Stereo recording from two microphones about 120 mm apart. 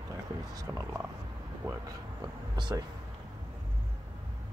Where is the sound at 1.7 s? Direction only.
30° right (ahead or behind).